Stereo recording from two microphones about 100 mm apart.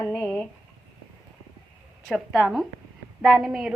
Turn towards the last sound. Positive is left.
turn(degrees=-5)  # may be behind; listen again after turning